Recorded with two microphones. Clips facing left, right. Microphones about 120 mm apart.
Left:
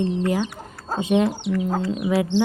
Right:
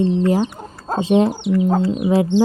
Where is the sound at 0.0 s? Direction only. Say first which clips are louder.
Right 5 dB; 30° right (ahead or behind).